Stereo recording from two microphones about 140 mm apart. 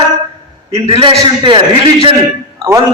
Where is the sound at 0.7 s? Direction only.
45° right (ahead or behind).